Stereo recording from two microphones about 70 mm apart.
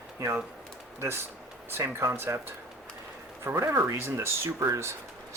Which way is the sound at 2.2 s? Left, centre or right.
Right.